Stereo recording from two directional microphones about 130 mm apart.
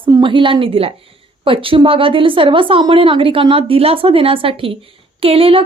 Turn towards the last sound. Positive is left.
turn(degrees=-45)  # may be behind; listen again after turning